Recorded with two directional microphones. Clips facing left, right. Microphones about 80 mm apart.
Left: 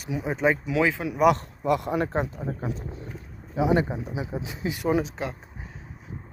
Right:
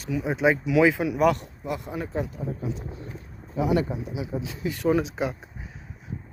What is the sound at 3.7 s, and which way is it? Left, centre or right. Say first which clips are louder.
Speech: even; left.